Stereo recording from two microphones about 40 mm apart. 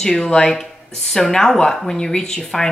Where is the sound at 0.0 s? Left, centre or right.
Centre.